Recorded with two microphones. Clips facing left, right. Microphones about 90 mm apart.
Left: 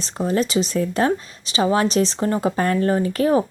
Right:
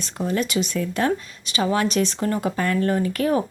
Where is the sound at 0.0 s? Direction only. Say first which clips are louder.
Left 3 dB; 30° left (ahead or behind).